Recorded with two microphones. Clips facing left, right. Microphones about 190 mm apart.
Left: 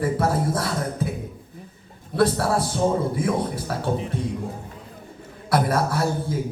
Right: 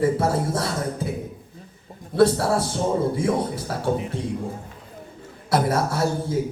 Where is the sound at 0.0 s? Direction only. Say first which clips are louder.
Right 1 dB; 25° right (ahead or behind).